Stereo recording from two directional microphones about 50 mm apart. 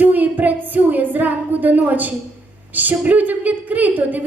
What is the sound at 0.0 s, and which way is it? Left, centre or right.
A woman's voice, right.